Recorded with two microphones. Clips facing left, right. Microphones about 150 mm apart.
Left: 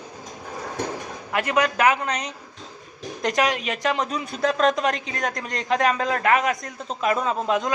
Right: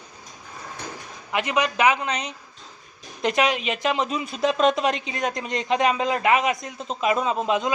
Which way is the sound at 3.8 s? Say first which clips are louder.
Even; 5° right (ahead or behind).